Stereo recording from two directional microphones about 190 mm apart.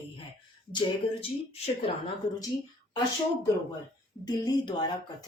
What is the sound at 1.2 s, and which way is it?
Speech, 30° left (ahead or behind).